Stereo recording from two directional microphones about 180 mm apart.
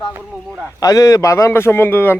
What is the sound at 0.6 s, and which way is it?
Speech, 20° left (ahead or behind).